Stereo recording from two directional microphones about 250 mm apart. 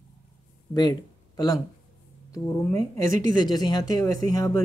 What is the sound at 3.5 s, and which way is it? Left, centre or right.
Speech, centre.